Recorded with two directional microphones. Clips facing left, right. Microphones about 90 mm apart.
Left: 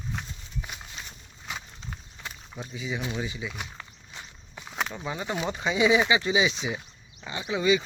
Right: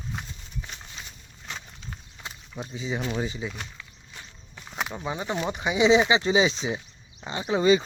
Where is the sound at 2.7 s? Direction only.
30° right (ahead or behind).